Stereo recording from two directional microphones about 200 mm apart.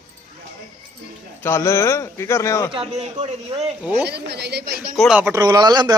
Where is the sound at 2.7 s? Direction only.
30° right (ahead or behind).